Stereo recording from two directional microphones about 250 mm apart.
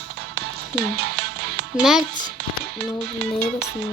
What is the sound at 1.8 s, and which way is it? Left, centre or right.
Speech, centre.